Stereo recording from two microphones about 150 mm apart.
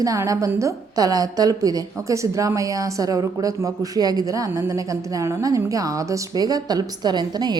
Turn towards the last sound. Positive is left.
turn(degrees=-30)  # may be behind; listen again after turning